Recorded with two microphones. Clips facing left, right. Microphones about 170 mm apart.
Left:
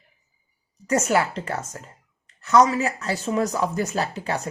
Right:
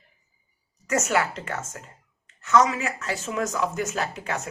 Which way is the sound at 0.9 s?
35° left (ahead or behind).